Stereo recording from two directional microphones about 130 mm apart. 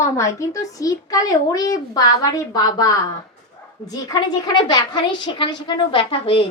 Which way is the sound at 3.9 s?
30° left (ahead or behind).